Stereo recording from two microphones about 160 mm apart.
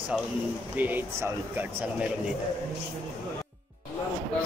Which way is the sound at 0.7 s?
10° right (ahead or behind).